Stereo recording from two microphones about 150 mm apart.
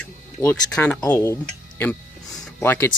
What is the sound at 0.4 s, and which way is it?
Speech, 10° left (ahead or behind).